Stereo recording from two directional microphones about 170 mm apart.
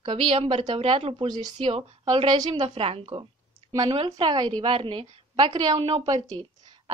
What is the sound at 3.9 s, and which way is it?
A woman's voice, 30° right (ahead or behind).